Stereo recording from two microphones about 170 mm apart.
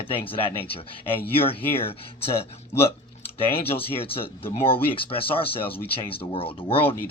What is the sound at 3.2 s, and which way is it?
Speech, 35° left (ahead or behind).